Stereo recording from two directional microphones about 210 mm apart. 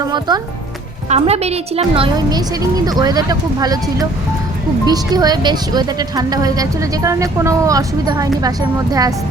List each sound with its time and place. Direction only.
1.1 s a woman's voice: 30° right (ahead or behind)